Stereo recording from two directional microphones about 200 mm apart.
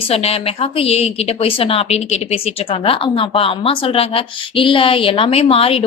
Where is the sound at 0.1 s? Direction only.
30° left (ahead or behind).